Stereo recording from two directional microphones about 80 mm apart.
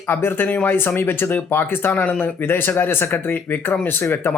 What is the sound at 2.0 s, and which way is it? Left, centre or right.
Speech, centre.